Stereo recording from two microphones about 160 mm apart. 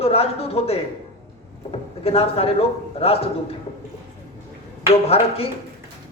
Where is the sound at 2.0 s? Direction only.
40° left (ahead or behind).